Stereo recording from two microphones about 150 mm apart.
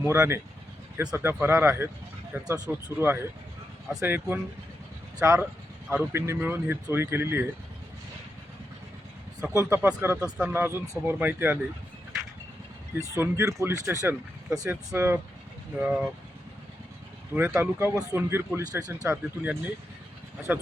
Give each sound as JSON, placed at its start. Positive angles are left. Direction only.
{"t": 0.0, "sound": "speech", "side_deg": -15}
{"t": 9.4, "sound": "speech", "side_deg": -15}
{"t": 10.2, "sound": "speech", "side_deg": -5}
{"t": 10.5, "sound": "speech", "side_deg": -15}
{"t": 12.9, "sound": "speech", "side_deg": -15}
{"t": 17.3, "sound": "speech", "side_deg": -15}